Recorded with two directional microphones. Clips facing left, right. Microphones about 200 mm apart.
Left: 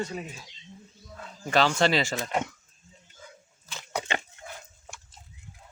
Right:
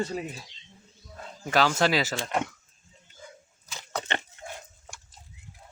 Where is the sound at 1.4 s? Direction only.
5° right (ahead or behind).